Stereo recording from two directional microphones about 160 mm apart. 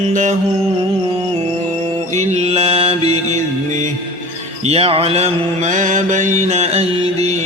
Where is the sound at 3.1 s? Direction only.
45° right (ahead or behind).